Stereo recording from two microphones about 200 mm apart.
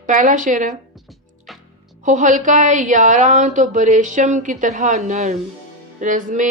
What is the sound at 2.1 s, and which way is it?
A woman's voice, 40° right (ahead or behind).